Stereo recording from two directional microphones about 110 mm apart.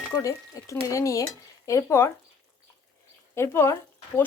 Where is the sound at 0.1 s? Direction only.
30° left (ahead or behind).